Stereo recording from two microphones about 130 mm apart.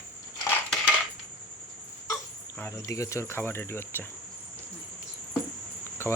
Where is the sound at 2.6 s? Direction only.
20° left (ahead or behind).